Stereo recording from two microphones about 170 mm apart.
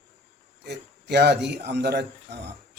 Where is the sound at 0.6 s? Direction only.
75° right (ahead or behind).